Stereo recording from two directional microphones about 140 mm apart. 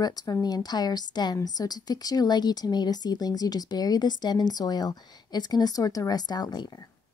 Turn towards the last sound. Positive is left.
turn(degrees=30)  # may be behind; listen again after turning